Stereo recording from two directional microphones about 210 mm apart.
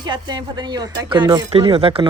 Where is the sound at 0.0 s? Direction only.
20° right (ahead or behind).